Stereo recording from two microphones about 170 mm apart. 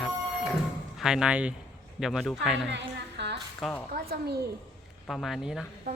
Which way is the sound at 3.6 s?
10° left (ahead or behind).